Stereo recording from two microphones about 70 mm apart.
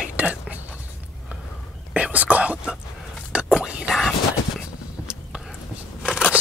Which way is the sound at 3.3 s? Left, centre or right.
Centre.